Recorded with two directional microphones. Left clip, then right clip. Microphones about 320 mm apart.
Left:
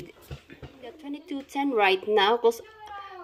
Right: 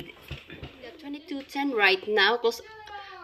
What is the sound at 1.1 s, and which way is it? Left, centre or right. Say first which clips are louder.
A woman's voice: left 1 dB; centre.